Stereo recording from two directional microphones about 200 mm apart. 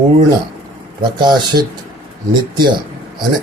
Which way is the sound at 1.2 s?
20° right (ahead or behind).